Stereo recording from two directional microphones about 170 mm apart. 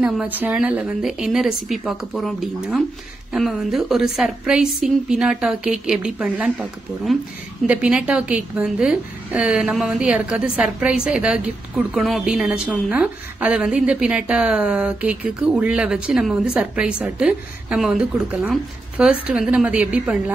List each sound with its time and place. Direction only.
0.0 s a woman's voice: 10° right (ahead or behind)